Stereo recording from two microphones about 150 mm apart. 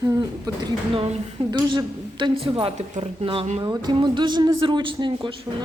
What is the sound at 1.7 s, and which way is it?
A woman's voice, 30° right (ahead or behind).